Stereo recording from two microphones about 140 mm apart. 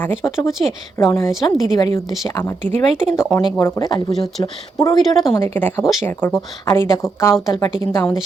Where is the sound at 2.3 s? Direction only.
20° left (ahead or behind).